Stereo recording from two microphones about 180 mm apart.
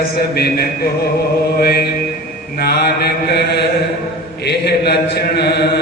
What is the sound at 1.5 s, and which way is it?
Chant, 60° left (ahead or behind).